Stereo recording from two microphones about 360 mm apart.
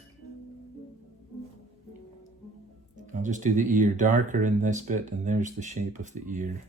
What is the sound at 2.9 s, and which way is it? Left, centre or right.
Speech, right.